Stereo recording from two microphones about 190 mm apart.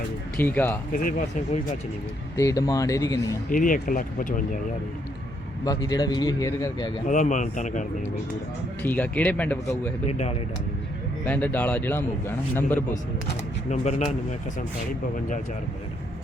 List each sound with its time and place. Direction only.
0.3 s speech: 10° left (ahead or behind)
2.3 s speech: 15° left (ahead or behind)
3.5 s speech: 45° left (ahead or behind)
5.6 s a man's voice: 20° left (ahead or behind)
7.1 s speech: 40° left (ahead or behind)
8.8 s speech: 10° left (ahead or behind)
10.1 s speech: 35° left (ahead or behind)
11.3 s speech: 5° left (ahead or behind)
13.7 s speech: 35° left (ahead or behind)